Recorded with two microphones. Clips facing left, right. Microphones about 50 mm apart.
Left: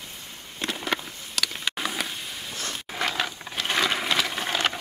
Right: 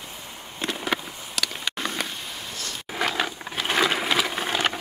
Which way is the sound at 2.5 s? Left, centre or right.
Left.